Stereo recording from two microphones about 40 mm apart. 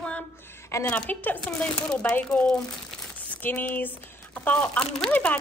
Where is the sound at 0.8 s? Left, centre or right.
Left.